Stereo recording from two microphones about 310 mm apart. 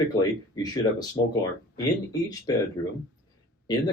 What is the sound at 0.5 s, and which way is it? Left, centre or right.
Speech, centre.